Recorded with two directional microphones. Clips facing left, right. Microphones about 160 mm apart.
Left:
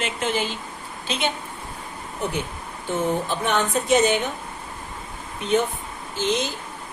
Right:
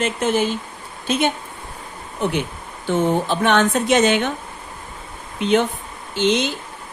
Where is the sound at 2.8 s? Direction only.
85° right.